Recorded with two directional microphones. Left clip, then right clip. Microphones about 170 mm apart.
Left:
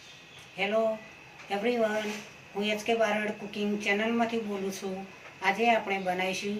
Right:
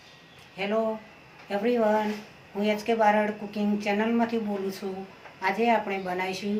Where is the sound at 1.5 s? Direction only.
10° right (ahead or behind).